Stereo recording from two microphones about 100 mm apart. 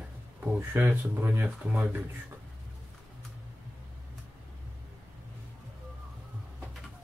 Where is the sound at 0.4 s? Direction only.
20° right (ahead or behind).